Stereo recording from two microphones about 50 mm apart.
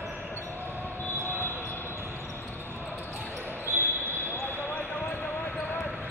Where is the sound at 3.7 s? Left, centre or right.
Right.